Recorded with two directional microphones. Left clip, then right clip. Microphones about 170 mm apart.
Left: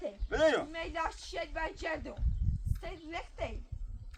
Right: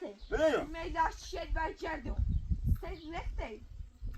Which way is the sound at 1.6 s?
25° left (ahead or behind).